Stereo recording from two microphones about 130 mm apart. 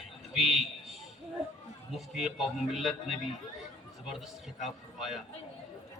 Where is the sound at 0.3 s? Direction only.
Centre (ahead or behind).